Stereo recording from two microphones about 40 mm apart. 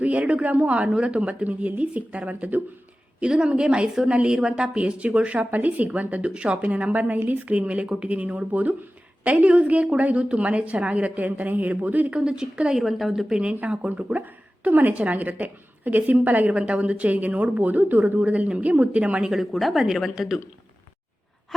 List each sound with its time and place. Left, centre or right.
0.0 s a woman's voice: right
3.2 s a woman's voice: right
4.8 s a woman's voice: right
5.5 s a woman's voice: right
7.5 s a woman's voice: right
12.1 s a woman's voice: right
12.7 s speech: centre
13.8 s a woman's voice: right
16.5 s a woman's voice: right
18.2 s a woman's voice: right
18.7 s a woman's voice: right
19.2 s a woman's voice: centre
19.5 s speech: centre